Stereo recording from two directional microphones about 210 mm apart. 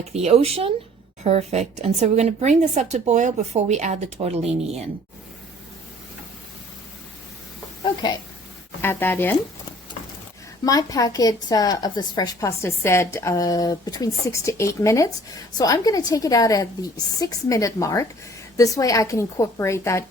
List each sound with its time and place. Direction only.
0.1 s a woman's voice: 30° right (ahead or behind)
8.8 s a woman's voice: 10° left (ahead or behind)
10.7 s a woman's voice: 15° left (ahead or behind)